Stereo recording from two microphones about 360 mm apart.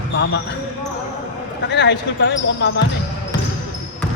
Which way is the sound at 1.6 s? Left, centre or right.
Left.